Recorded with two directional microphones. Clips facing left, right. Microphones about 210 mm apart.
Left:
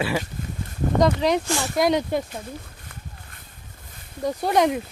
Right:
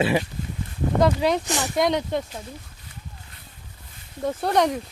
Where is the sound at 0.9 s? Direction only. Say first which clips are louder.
Left 1 dB; 5° right (ahead or behind).